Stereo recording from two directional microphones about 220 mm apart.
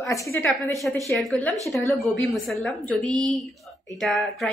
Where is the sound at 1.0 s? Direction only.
Centre (ahead or behind).